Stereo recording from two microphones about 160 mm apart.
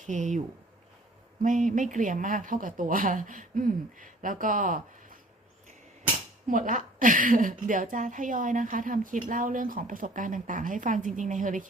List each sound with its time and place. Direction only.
0.0 s a woman's voice: 50° right (ahead or behind)
6.5 s a woman's voice: 55° right (ahead or behind)